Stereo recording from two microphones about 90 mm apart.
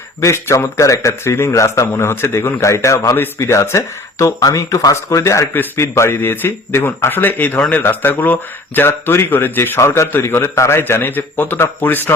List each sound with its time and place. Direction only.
0.2 s a man's voice: 35° left (ahead or behind)